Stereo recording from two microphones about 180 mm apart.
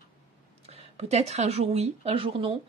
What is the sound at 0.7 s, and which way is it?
Speech, 35° right (ahead or behind).